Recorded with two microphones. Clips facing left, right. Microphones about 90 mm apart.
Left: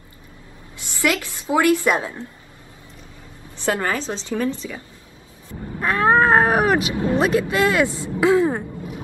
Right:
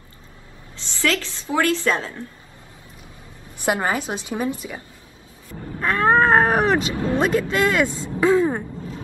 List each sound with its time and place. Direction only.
0.7 s a woman's voice: 15° left (ahead or behind)
3.6 s a woman's voice: 15° right (ahead or behind)
5.5 s a sound: 10° left (ahead or behind)
7.2 s speech: 10° left (ahead or behind)